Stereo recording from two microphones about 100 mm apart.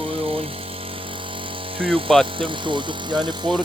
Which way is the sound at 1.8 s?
60° right (ahead or behind).